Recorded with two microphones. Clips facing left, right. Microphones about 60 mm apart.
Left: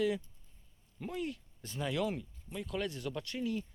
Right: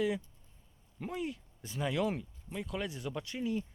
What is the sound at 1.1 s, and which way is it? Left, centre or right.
Speech, centre.